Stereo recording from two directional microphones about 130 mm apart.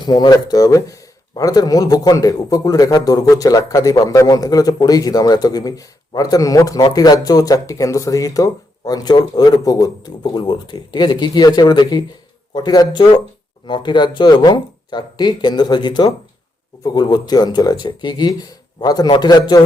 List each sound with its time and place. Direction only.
0.0 s a man's voice: 35° left (ahead or behind)